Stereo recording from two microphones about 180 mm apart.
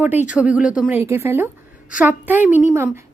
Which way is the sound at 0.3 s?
5° right (ahead or behind).